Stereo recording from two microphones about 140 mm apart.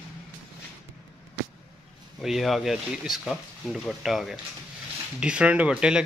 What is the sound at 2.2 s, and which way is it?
Speech, centre (ahead or behind).